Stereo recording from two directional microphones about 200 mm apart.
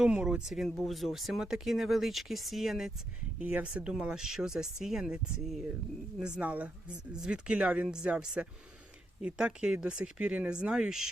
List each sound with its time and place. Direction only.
0.0 s speech: 5° right (ahead or behind)